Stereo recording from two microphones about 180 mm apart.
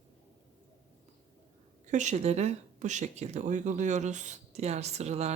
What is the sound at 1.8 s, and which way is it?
Speech, 40° right (ahead or behind).